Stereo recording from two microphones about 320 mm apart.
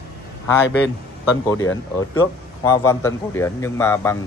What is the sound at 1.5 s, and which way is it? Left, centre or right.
A man's voice, centre.